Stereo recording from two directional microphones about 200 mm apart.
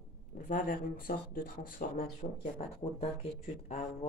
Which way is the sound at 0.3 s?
45° left (ahead or behind).